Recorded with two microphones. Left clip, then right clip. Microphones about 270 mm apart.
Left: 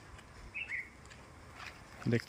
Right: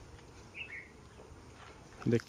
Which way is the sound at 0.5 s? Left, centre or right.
Right.